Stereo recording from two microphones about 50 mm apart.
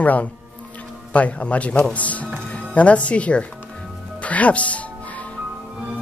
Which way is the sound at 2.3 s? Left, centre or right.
Centre.